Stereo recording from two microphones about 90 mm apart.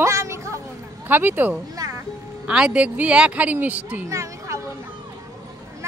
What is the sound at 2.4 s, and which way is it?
Speech, 10° right (ahead or behind).